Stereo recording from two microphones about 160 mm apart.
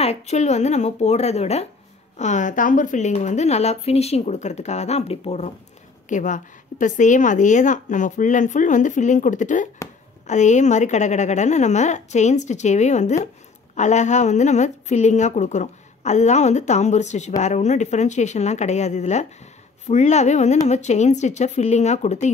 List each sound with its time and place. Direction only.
0.0 s a woman's voice: 40° left (ahead or behind)
6.0 s a woman's voice: 50° left (ahead or behind)